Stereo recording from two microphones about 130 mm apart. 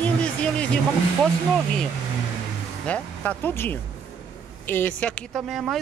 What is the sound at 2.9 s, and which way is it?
Speech, 15° left (ahead or behind).